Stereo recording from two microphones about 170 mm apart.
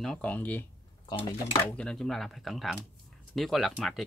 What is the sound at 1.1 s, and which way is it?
Speech, 30° left (ahead or behind).